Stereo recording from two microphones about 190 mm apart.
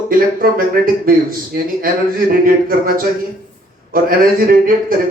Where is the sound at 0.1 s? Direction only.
50° right (ahead or behind).